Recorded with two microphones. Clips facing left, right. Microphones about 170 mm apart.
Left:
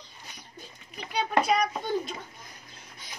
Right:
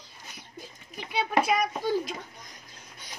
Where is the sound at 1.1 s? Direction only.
5° right (ahead or behind).